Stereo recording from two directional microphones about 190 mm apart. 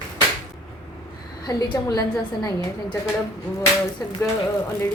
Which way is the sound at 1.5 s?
20° left (ahead or behind).